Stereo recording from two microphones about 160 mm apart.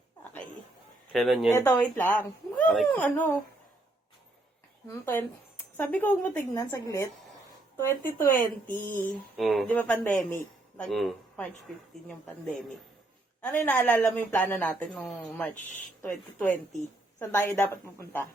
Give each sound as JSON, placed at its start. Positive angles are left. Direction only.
{"t": 1.1, "sound": "speech", "side_deg": 0}
{"t": 1.5, "sound": "a woman's voice", "side_deg": 10}
{"t": 4.9, "sound": "a woman's voice", "side_deg": 15}
{"t": 9.4, "sound": "a woman's voice", "side_deg": 0}
{"t": 15.5, "sound": "speech", "side_deg": 50}
{"t": 16.0, "sound": "a woman's voice", "side_deg": 10}